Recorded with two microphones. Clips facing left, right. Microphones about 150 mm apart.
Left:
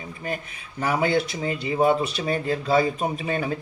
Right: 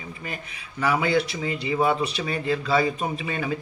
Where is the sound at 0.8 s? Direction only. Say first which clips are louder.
Even; 45° left (ahead or behind).